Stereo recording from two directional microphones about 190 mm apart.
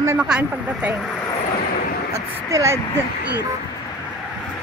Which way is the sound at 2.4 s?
15° right (ahead or behind).